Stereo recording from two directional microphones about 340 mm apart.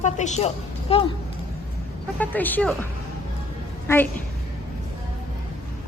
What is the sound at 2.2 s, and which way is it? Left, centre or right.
A woman's voice, centre.